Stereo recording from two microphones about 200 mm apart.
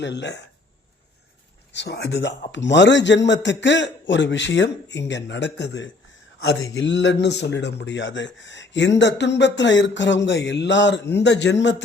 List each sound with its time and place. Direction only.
0.0 s a man's voice: 60° left (ahead or behind)
1.7 s a man's voice: 55° left (ahead or behind)